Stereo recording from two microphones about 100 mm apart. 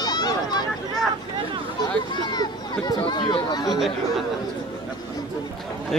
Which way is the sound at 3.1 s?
45° left (ahead or behind).